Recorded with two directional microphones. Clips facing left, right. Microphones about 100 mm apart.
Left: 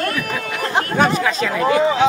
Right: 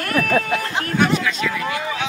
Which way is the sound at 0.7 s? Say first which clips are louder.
Left 4 dB; 40° left (ahead or behind).